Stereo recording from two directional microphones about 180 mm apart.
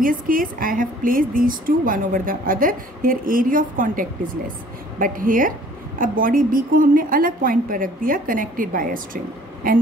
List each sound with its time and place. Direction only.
0.0 s a woman's voice: 50° right (ahead or behind)